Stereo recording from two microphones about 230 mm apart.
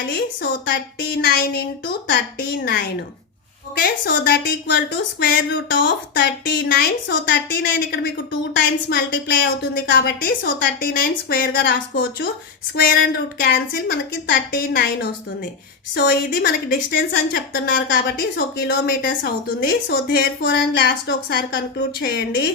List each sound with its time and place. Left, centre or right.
1.0 s a woman's voice: left